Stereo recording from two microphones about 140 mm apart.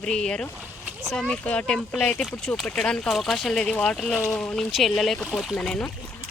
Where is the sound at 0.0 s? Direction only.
5° left (ahead or behind).